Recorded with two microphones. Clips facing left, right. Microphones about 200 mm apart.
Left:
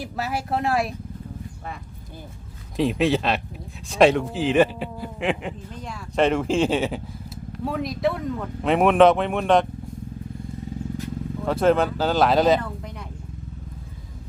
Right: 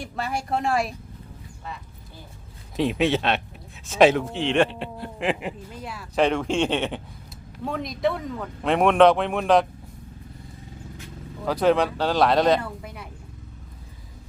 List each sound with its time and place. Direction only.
0.0 s speech: 5° left (ahead or behind)
2.7 s speech: centre (ahead or behind)
11.4 s speech: centre (ahead or behind)
12.6 s a sound: 5° right (ahead or behind)